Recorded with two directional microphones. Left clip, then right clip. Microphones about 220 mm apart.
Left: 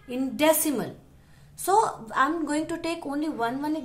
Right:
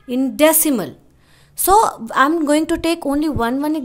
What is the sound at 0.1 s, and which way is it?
A woman's voice, 45° right (ahead or behind).